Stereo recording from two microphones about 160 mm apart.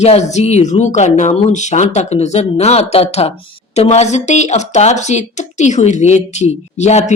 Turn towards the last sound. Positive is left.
turn(degrees=45)  # may be behind; listen again after turning